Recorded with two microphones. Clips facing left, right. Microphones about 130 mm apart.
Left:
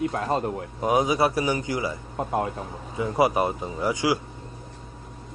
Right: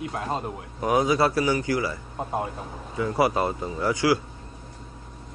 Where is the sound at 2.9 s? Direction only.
20° left (ahead or behind).